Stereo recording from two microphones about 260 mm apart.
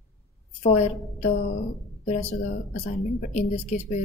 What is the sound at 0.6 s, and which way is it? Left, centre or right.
Speech, left.